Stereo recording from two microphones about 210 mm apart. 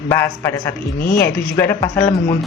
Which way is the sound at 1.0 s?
45° left (ahead or behind).